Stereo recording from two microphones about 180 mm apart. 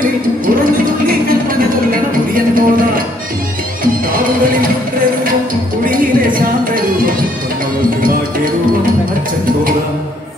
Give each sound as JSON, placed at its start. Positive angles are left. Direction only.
{"t": 1.9, "sound": "music", "side_deg": -50}
{"t": 3.8, "sound": "music", "side_deg": -50}
{"t": 5.9, "sound": "a sound", "side_deg": -50}